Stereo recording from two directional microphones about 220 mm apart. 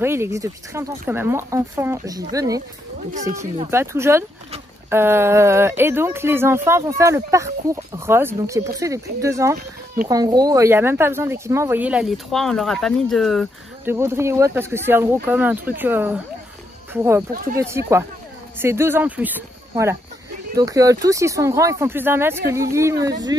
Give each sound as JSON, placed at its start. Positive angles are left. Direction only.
{"t": 0.0, "sound": "speech", "side_deg": -10}
{"t": 3.7, "sound": "speech", "side_deg": -10}
{"t": 13.8, "sound": "speech", "side_deg": -10}